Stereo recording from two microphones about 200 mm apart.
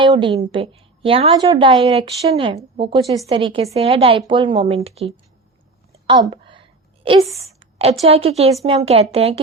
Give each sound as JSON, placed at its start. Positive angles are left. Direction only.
{"t": 0.0, "sound": "a woman's voice", "side_deg": -25}
{"t": 6.1, "sound": "a sound", "side_deg": -20}
{"t": 8.0, "sound": "a woman's voice", "side_deg": -30}